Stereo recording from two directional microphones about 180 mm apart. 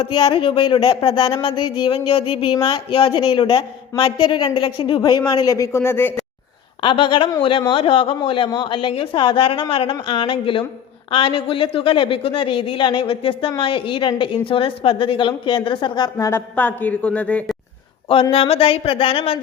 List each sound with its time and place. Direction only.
0.0 s speech: 25° left (ahead or behind)
6.8 s speech: 30° left (ahead or behind); by 17.6 s 5° left (ahead or behind)
18.1 s a sound: 30° left (ahead or behind)